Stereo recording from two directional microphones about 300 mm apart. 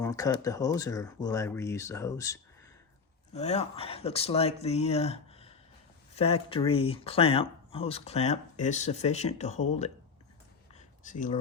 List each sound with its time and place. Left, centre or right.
0.0 s speech: centre
3.3 s speech: left
10.8 s a sound: left